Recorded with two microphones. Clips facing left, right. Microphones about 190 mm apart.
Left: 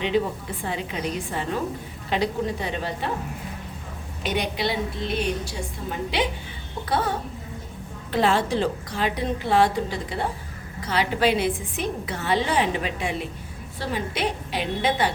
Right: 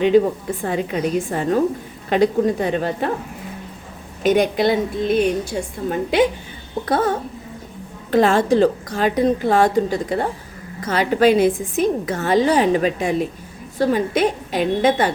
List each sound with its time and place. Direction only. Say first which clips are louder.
0.1 s a woman's voice: right 9 dB; 45° right (ahead or behind)
4.2 s a woman's voice: right 10 dB; 50° right (ahead or behind)